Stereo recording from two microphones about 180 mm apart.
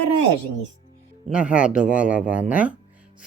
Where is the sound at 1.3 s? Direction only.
5° right (ahead or behind).